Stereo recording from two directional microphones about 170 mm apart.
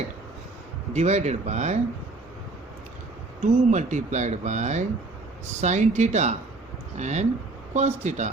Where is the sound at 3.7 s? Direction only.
45° right (ahead or behind).